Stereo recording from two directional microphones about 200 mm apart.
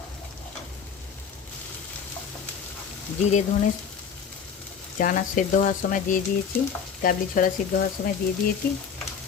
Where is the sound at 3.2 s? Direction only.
35° left (ahead or behind).